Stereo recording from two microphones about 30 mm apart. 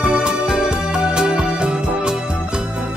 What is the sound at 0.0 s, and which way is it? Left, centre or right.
Music, right.